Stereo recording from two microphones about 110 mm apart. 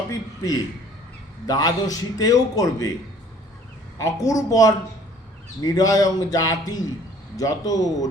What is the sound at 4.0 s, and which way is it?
A man's voice, 30° left (ahead or behind).